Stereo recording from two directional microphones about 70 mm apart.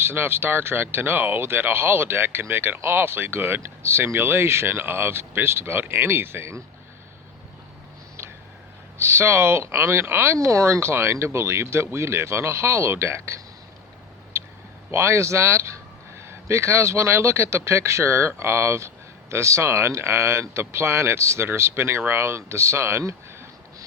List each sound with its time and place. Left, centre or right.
0.0 s speech: right
9.0 s speech: right
10.3 s speech: right
14.3 s a sound: right
14.8 s speech: right